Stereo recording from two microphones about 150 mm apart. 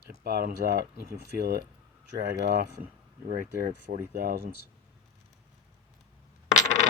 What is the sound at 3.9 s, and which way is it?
Speech, 65° right (ahead or behind).